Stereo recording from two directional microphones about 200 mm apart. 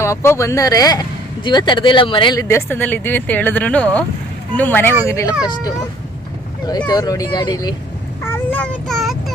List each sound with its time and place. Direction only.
0.0 s speech: 15° left (ahead or behind)
6.7 s speech: 20° left (ahead or behind)
8.2 s child singing: 10° left (ahead or behind)